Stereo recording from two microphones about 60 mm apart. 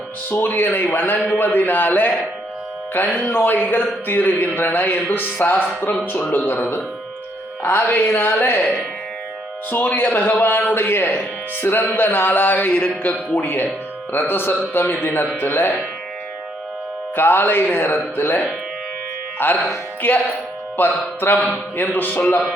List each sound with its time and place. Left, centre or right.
0.3 s speech: left
3.2 s speech: left
6.3 s speech: left
13.4 s speech: left
17.2 s speech: left